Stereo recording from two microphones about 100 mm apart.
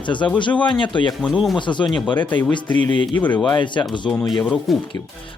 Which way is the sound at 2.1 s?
20° left (ahead or behind).